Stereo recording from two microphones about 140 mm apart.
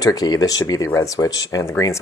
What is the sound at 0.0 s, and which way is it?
Speech, 25° left (ahead or behind).